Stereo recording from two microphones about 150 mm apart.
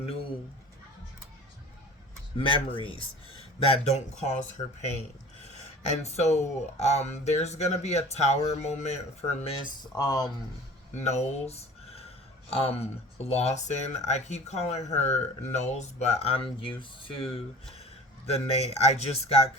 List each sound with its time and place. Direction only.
2.4 s speech: 35° left (ahead or behind)
9.9 s speech: 25° left (ahead or behind)
10.9 s a sound: 50° left (ahead or behind)
13.2 s speech: 45° left (ahead or behind)
18.3 s speech: 45° left (ahead or behind)